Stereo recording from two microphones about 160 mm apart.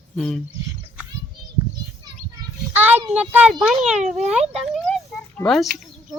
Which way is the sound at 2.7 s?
10° right (ahead or behind).